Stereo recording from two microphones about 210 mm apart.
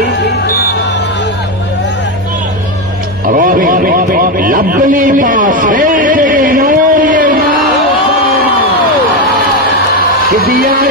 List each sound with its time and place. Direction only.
0.2 s music: 55° left (ahead or behind)
3.3 s a sound: 40° right (ahead or behind)
10.4 s music: 45° right (ahead or behind)